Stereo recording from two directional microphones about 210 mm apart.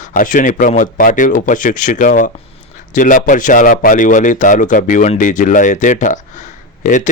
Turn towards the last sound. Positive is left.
turn(degrees=35)  # may be behind; listen again after turning